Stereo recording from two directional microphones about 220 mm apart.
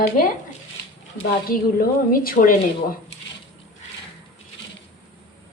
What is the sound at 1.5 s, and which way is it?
A woman's voice, 40° left (ahead or behind).